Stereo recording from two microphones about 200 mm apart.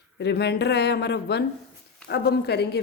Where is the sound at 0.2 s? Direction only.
55° left (ahead or behind).